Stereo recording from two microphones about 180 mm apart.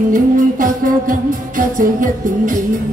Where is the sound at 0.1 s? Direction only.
50° right (ahead or behind).